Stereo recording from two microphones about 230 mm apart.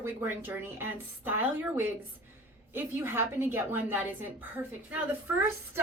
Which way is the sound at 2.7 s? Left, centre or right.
Centre.